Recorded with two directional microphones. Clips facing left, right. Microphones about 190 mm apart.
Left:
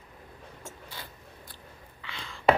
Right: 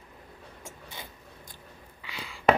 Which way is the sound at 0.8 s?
20° right (ahead or behind).